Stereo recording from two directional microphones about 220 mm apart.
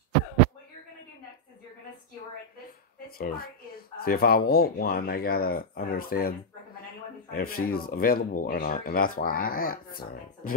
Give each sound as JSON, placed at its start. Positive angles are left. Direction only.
{"t": 3.1, "sound": "speech", "side_deg": 40}